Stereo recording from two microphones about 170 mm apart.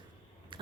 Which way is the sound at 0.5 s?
30° right (ahead or behind).